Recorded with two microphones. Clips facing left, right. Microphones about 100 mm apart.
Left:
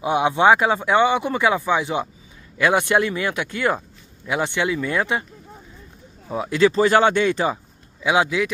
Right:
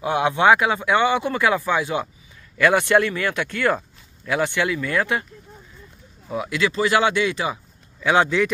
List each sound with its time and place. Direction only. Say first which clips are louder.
0.0 s speech: left 1 dB; 20° left (ahead or behind)
6.3 s speech: left 5 dB; 35° left (ahead or behind)
8.0 s speech: right 1 dB; 10° left (ahead or behind)